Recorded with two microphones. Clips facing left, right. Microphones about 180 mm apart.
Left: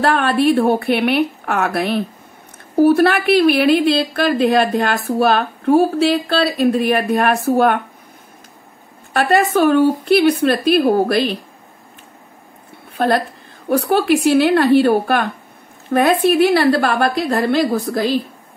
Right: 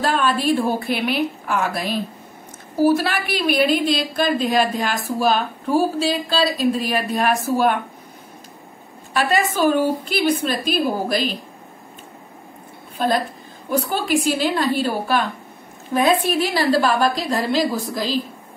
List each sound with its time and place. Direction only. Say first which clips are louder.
0.0 s a woman's voice: left 5 dB; 65° left (ahead or behind)
9.1 s a woman's voice: left 5 dB; 60° left (ahead or behind)
12.9 s a woman's voice: left 4 dB; 65° left (ahead or behind)